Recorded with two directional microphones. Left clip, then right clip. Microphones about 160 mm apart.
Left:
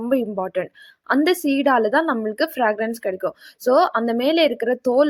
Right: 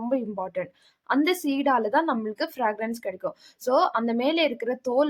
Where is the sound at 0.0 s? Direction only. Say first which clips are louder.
Left 6 dB; 30° left (ahead or behind).